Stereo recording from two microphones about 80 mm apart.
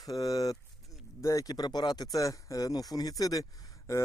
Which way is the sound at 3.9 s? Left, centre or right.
Left.